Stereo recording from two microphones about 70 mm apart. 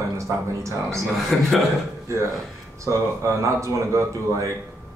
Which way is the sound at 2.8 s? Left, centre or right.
Right.